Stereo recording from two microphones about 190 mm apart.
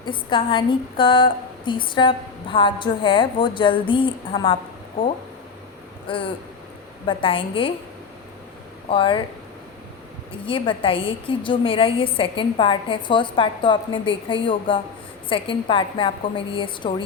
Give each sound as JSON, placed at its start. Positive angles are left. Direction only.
{"t": 0.3, "sound": "speech", "side_deg": 25}
{"t": 6.1, "sound": "speech", "side_deg": 25}
{"t": 8.9, "sound": "speech", "side_deg": 25}
{"t": 10.4, "sound": "speech", "side_deg": 30}